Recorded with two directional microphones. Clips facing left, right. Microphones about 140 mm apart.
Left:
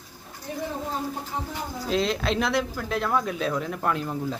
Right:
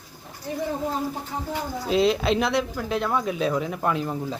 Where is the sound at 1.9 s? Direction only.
5° right (ahead or behind).